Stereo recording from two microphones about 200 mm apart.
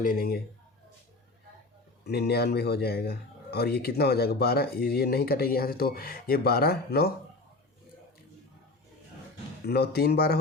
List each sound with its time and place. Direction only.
0.0 s speech: 45° left (ahead or behind)
2.0 s speech: 55° left (ahead or behind)
9.6 s speech: 55° left (ahead or behind)